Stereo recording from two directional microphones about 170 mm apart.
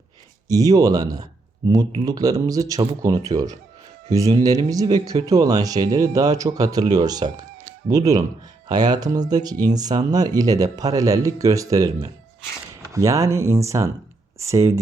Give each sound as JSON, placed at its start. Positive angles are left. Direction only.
{"t": 0.4, "sound": "speech", "side_deg": -20}
{"t": 12.9, "sound": "speech", "side_deg": -20}